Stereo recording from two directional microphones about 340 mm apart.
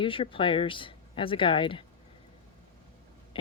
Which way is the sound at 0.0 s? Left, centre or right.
Centre.